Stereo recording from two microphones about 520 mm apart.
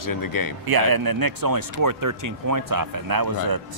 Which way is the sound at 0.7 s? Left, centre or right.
Right.